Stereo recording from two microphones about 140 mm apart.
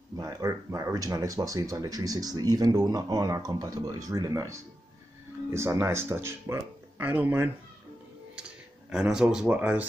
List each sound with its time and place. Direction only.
0.2 s speech: 20° right (ahead or behind)
9.1 s speech: 5° right (ahead or behind)